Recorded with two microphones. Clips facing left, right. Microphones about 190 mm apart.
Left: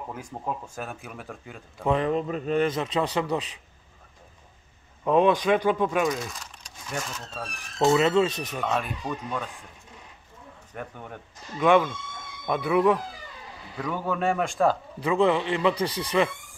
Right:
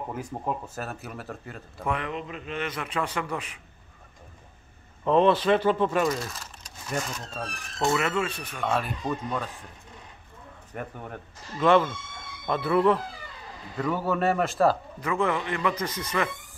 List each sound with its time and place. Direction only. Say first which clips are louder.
0.1 s speech: right 1 dB; 5° right (ahead or behind)
1.9 s a man's voice: left 7 dB; 35° left (ahead or behind)
2.7 s a man's voice: left 4 dB; 20° left (ahead or behind)
5.0 s speech: even; 10° left (ahead or behind); by 7.2 s 10° right (ahead or behind)
7.8 s a man's voice: left 6 dB; 25° left (ahead or behind)
8.5 s speech: right 2 dB; 5° left (ahead or behind)
10.7 s speech: right 1 dB; 5° right (ahead or behind)
11.5 s speech: left 1 dB; 10° left (ahead or behind)
13.8 s speech: right 1 dB; 5° right (ahead or behind)
15.0 s a man's voice: left 4 dB; 15° left (ahead or behind)
15.7 s a man's voice: left 4 dB; 35° left (ahead or behind)
16.0 s speech: left 5 dB; 15° left (ahead or behind)